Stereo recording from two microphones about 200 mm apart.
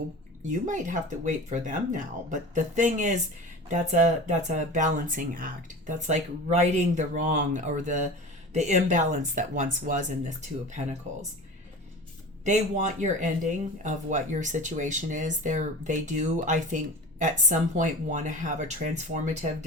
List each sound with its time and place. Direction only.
0.4 s speech: 40° right (ahead or behind)
12.5 s speech: 35° right (ahead or behind)